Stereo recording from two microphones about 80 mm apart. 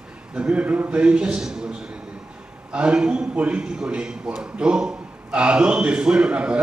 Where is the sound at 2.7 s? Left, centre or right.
Centre.